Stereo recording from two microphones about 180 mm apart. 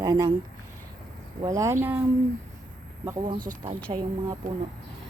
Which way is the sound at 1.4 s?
20° right (ahead or behind).